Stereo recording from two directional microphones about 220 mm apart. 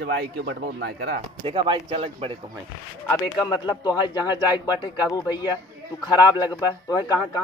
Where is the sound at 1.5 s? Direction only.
25° right (ahead or behind).